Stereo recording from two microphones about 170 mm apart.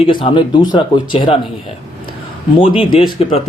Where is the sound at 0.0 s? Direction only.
30° left (ahead or behind).